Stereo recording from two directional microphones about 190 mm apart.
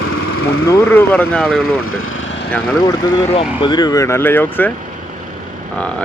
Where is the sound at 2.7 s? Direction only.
20° left (ahead or behind).